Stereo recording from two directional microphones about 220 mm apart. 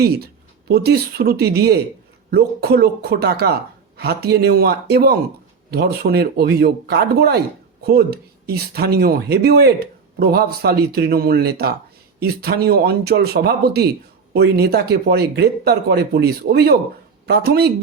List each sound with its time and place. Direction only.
0.0 s speech: 45° right (ahead or behind)